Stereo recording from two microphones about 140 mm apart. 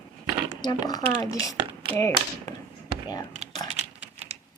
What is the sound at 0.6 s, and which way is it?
Speech, 30° left (ahead or behind).